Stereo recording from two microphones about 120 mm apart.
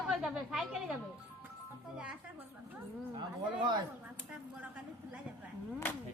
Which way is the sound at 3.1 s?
40° right (ahead or behind).